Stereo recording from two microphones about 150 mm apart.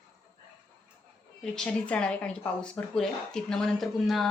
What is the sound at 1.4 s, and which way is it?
Speech, 5° left (ahead or behind).